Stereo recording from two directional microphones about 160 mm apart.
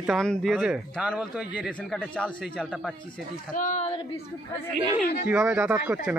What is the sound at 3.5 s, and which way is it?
Speech, 50° left (ahead or behind).